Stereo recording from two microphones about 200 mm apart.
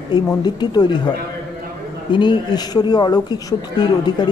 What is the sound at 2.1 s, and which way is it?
A woman's voice, 20° left (ahead or behind).